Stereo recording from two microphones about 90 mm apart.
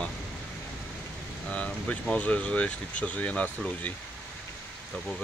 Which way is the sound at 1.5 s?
15° left (ahead or behind).